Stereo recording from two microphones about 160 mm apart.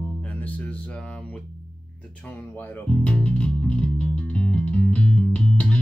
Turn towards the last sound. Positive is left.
turn(degrees=10)  # may be behind; listen again after turning